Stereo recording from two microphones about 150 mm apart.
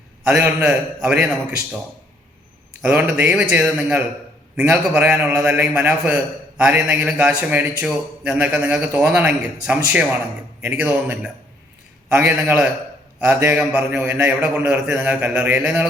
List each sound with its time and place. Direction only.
0.3 s a man's voice: 10° right (ahead or behind)
2.8 s a man's voice: 10° right (ahead or behind)